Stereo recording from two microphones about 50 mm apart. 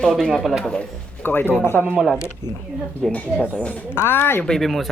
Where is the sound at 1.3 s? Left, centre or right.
Left.